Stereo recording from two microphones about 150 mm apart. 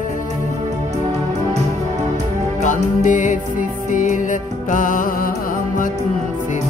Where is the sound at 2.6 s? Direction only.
55° left (ahead or behind).